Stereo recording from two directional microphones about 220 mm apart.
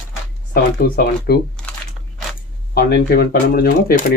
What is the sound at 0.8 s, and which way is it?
Speech, 45° left (ahead or behind).